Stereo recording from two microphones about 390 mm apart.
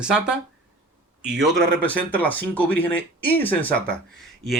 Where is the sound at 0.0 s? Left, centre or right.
Centre.